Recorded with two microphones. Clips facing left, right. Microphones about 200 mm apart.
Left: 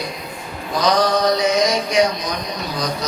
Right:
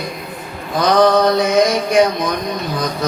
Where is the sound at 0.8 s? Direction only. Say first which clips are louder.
Right 5 dB; 55° right (ahead or behind).